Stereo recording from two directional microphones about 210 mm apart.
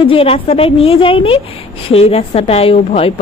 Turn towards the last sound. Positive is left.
turn(degrees=30)  # may be behind; listen again after turning